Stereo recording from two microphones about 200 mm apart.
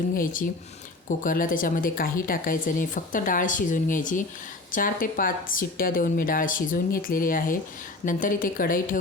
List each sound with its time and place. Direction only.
0.1 s speech: 45° left (ahead or behind)